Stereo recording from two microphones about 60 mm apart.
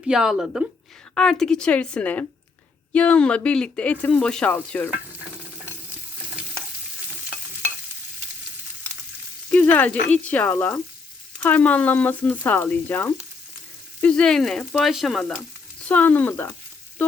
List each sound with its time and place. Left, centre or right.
0.1 s a woman's voice: centre
1.1 s a woman's voice: centre
9.5 s speech: left
14.1 s a woman's voice: centre
14.7 s frying: centre
15.9 s speech: left